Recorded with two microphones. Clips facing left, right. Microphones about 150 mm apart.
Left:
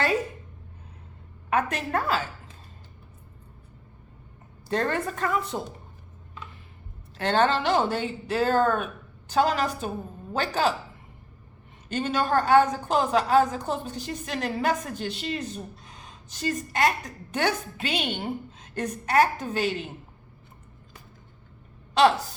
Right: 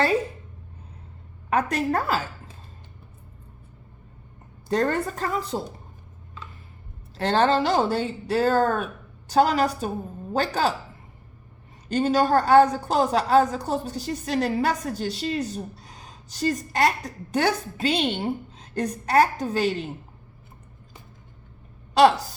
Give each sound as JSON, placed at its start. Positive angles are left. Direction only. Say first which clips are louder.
{"t": 1.5, "sound": "a woman's voice", "louder": "right 3 dB", "side_deg": -35}
{"t": 4.7, "sound": "a woman's voice", "louder": "right 3 dB", "side_deg": -40}
{"t": 7.2, "sound": "a woman's voice", "louder": "right 2 dB", "side_deg": -35}
{"t": 11.9, "sound": "a woman's voice", "louder": "right 5 dB", "side_deg": -35}